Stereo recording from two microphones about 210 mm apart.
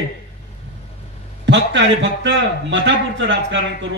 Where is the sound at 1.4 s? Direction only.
60° right (ahead or behind).